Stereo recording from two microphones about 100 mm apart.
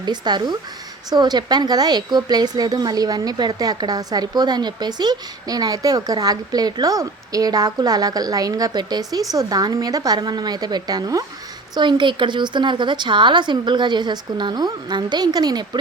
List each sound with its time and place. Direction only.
0.0 s a woman's voice: 45° right (ahead or behind)
11.7 s a woman's voice: 50° right (ahead or behind)